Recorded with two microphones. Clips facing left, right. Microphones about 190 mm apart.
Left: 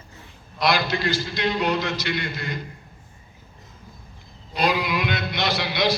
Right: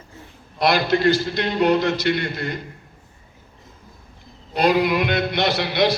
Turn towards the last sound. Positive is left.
turn(degrees=-55)  # may be behind; listen again after turning